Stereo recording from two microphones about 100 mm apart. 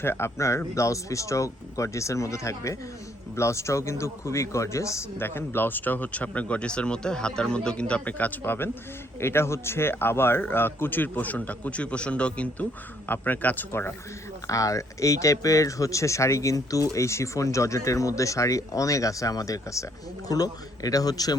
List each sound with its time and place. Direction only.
0.0 s speech: 25° left (ahead or behind)
14.4 s speech: 35° left (ahead or behind)